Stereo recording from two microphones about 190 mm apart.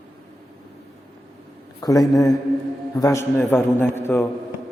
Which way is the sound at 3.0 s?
15° left (ahead or behind).